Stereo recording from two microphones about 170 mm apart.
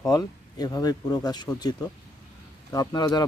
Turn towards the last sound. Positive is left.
turn(degrees=25)  # may be behind; listen again after turning